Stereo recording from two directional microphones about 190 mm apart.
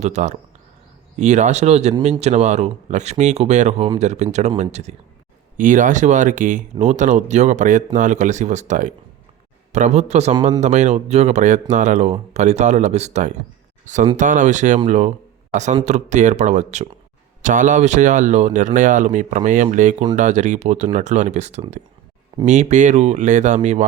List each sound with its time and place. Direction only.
0.0 s speech: 40° right (ahead or behind)